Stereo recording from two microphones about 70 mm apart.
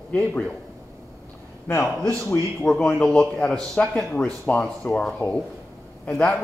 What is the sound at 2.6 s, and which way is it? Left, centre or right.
A man's voice, centre.